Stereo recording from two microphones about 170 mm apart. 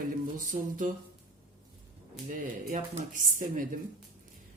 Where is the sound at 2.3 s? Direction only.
50° right (ahead or behind).